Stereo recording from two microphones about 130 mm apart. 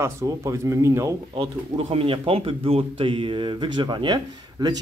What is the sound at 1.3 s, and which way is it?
Speech, 45° right (ahead or behind).